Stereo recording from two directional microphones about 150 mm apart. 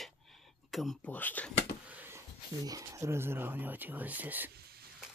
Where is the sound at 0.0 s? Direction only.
Centre (ahead or behind).